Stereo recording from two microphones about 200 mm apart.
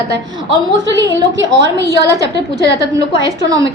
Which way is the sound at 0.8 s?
65° right (ahead or behind).